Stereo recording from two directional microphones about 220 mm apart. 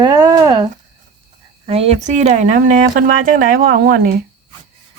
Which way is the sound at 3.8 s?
45° right (ahead or behind).